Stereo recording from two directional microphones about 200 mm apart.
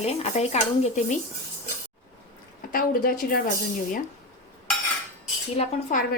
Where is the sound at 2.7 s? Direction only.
45° left (ahead or behind).